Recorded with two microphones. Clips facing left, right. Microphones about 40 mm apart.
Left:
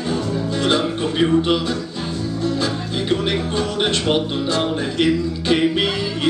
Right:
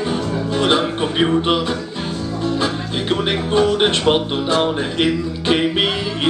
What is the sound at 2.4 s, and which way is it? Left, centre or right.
Speech, right.